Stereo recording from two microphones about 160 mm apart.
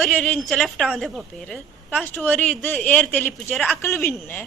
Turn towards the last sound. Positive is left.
turn(degrees=15)  # may be behind; listen again after turning